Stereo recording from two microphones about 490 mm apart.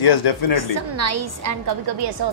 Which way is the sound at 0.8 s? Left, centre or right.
Right.